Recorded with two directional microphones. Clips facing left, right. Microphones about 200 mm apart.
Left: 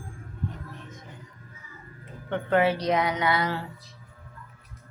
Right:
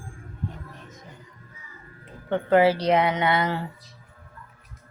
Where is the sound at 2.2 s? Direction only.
30° right (ahead or behind).